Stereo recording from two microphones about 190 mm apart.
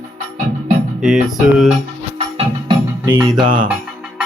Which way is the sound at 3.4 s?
45° right (ahead or behind).